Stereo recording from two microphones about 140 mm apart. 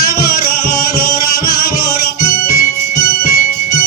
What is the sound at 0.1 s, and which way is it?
Music, 90° left.